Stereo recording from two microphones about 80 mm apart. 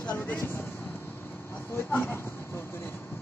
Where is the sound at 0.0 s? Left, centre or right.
Left.